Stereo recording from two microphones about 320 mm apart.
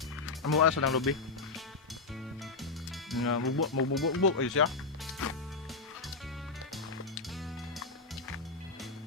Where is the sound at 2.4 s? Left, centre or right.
Centre.